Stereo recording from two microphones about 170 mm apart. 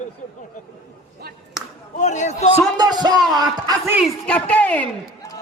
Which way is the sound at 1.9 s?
45° left (ahead or behind).